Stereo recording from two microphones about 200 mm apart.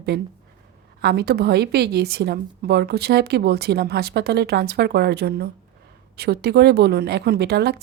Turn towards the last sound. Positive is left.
turn(degrees=-55)  # may be behind; listen again after turning